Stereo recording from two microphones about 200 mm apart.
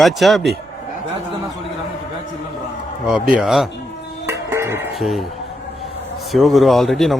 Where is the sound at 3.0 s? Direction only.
5° right (ahead or behind).